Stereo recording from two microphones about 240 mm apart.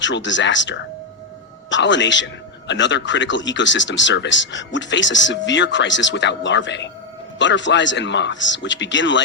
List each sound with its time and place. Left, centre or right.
0.0 s a man's voice: left